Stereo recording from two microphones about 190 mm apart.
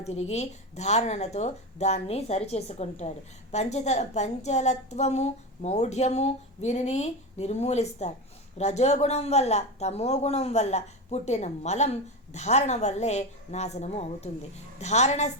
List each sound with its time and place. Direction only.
0.0 s a woman's voice: 35° left (ahead or behind)